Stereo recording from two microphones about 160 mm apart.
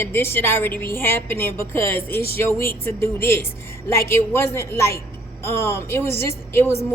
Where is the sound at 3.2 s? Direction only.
15° left (ahead or behind).